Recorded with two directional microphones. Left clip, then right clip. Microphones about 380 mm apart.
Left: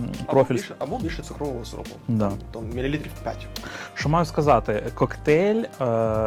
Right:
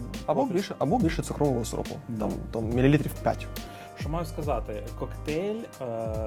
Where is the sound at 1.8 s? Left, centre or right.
Centre.